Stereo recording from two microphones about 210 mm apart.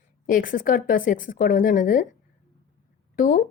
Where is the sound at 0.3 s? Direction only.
40° left (ahead or behind).